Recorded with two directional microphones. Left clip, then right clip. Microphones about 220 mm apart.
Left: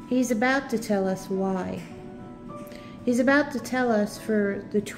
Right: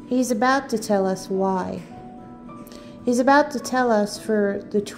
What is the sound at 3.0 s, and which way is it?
A woman's voice, 15° right (ahead or behind).